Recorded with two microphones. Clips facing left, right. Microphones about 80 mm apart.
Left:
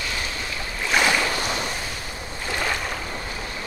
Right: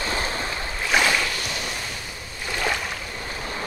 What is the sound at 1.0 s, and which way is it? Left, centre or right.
Boat, centre.